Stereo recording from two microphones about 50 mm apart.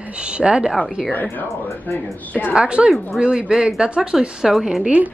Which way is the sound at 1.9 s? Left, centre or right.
Left.